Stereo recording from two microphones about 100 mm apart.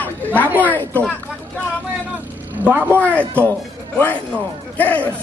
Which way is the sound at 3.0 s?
15° left (ahead or behind).